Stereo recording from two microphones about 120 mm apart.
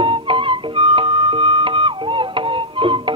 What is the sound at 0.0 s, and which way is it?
Music, 45° right (ahead or behind).